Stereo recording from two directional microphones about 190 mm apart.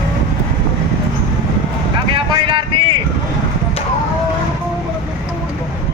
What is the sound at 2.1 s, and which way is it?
Boat, 25° right (ahead or behind).